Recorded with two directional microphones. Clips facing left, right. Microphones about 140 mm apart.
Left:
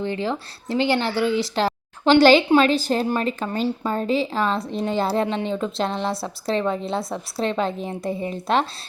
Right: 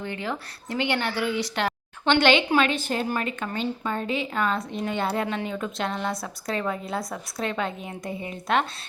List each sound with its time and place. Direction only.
0.0 s speech: 30° left (ahead or behind)